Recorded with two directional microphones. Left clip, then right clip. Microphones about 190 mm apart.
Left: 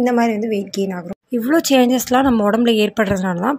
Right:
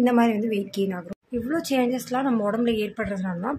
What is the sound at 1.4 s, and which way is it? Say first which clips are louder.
A woman's voice: left 10 dB; 40° left (ahead or behind).